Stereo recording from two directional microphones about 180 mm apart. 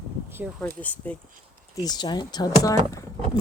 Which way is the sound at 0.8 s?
10° left (ahead or behind).